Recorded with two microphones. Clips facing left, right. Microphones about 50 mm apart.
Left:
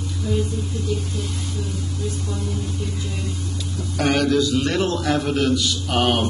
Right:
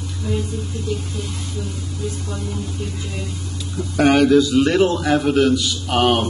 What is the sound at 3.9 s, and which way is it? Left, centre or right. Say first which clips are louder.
A man's voice: right 6 dB; centre.